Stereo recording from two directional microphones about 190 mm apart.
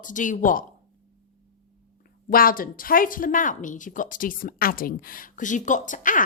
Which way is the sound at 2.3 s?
50° left (ahead or behind).